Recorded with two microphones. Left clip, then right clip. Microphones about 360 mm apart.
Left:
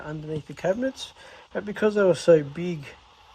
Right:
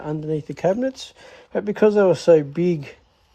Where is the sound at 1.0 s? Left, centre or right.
Centre.